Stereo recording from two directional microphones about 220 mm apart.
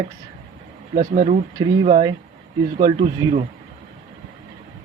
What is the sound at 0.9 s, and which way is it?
Speech, 35° right (ahead or behind).